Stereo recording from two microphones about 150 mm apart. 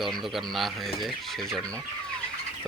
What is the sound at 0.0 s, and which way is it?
Speech, centre (ahead or behind).